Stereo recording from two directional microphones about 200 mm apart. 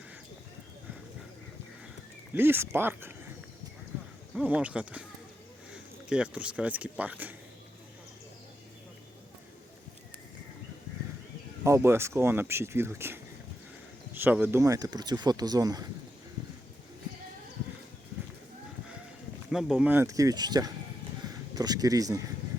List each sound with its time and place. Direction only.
2.3 s speech: 10° right (ahead or behind)
4.4 s speech: 5° right (ahead or behind)
11.6 s speech: 15° right (ahead or behind)
19.5 s speech: 5° right (ahead or behind)